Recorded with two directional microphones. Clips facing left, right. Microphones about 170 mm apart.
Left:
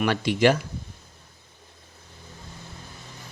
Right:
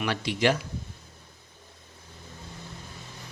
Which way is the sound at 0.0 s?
55° left (ahead or behind).